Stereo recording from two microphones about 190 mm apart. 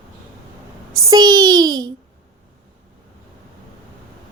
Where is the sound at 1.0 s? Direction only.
20° right (ahead or behind).